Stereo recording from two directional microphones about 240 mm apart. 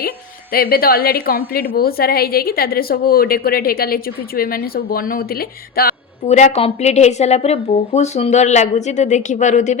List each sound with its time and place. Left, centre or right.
0.5 s a woman's voice: left